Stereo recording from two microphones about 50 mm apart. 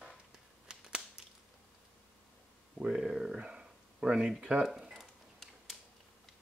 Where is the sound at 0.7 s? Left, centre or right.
Centre.